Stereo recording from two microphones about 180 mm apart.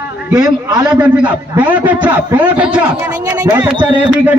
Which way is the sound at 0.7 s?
20° right (ahead or behind).